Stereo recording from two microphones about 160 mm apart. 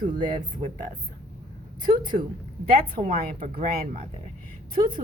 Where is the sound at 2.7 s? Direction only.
65° right (ahead or behind).